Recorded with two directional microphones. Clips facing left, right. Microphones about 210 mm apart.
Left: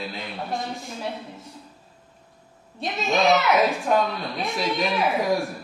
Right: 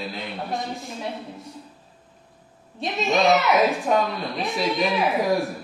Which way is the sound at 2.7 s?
Centre (ahead or behind).